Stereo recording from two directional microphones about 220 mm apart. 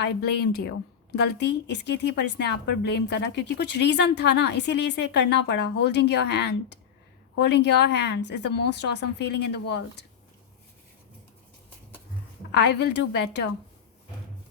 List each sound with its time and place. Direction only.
0.0 s speech: 50° left (ahead or behind)
12.5 s speech: 50° left (ahead or behind)